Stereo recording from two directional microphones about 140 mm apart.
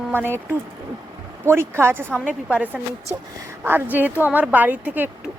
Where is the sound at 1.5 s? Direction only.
15° right (ahead or behind).